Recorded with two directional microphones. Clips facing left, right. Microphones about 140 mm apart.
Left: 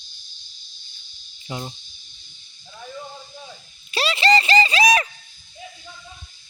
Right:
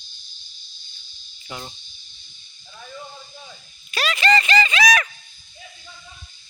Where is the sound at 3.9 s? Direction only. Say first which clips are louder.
Left 1 dB; 30° left (ahead or behind).